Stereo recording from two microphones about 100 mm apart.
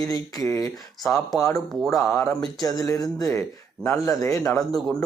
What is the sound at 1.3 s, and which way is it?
Speech, 30° left (ahead or behind).